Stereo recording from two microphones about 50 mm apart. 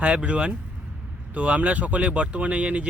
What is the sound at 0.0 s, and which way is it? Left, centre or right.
Speech, right.